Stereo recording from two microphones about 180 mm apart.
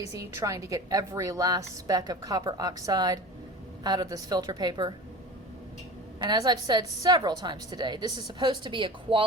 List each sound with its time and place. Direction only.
0.3 s a woman's voice: 15° right (ahead or behind)
6.1 s a woman's voice: 25° right (ahead or behind)